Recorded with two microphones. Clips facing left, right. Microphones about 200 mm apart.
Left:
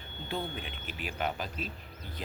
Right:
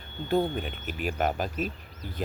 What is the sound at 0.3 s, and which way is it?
Speech, 45° right (ahead or behind).